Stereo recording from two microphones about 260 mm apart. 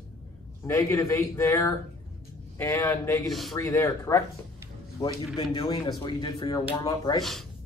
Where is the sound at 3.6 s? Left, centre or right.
Centre.